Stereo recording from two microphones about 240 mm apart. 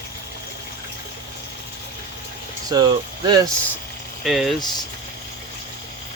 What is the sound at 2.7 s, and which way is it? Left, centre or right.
Speech, centre.